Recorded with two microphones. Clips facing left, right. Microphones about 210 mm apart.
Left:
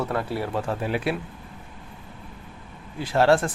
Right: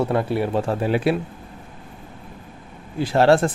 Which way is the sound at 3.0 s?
30° right (ahead or behind).